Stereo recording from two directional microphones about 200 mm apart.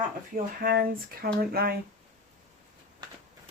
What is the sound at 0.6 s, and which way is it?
Speech, 50° right (ahead or behind).